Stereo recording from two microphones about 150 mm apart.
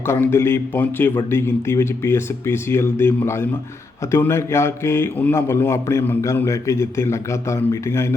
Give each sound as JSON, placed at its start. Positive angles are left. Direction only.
{"t": 0.1, "sound": "speech", "side_deg": 15}